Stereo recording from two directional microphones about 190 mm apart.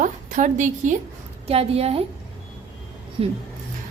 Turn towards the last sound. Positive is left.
turn(degrees=-25)  # may be behind; listen again after turning